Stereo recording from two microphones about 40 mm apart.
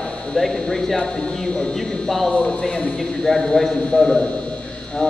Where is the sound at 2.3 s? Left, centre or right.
Left.